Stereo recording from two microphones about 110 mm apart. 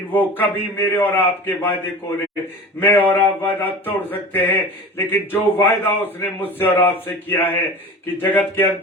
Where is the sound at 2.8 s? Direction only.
15° left (ahead or behind).